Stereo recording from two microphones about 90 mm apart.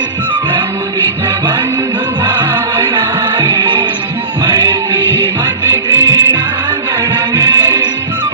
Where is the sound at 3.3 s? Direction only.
55° right (ahead or behind).